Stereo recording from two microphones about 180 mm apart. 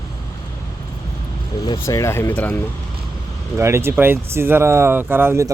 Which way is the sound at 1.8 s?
15° left (ahead or behind).